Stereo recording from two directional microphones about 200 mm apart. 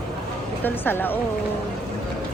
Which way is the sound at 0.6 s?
10° left (ahead or behind).